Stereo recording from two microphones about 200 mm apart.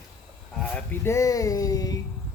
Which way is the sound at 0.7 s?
10° left (ahead or behind).